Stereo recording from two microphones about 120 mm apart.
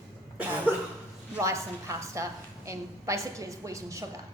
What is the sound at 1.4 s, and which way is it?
A woman's voice, 25° right (ahead or behind).